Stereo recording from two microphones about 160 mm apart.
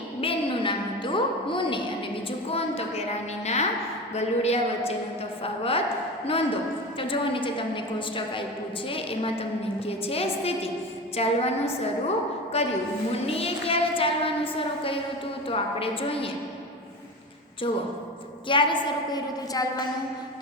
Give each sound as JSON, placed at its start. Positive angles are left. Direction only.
{"t": 0.2, "sound": "music", "side_deg": 35}
{"t": 2.5, "sound": "a sound", "side_deg": 40}
{"t": 4.1, "sound": "child singing", "side_deg": 40}
{"t": 5.4, "sound": "a woman's voice", "side_deg": 35}
{"t": 6.2, "sound": "child singing", "side_deg": 35}
{"t": 18.4, "sound": "child singing", "side_deg": 30}